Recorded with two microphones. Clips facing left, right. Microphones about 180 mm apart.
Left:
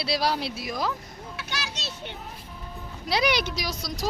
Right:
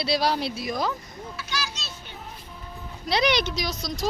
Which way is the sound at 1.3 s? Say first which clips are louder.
Right 2 dB; 65° left (ahead or behind).